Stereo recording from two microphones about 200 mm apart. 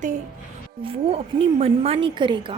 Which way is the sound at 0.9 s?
30° right (ahead or behind).